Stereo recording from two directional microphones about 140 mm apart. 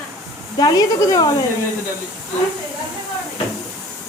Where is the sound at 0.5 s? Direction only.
30° left (ahead or behind).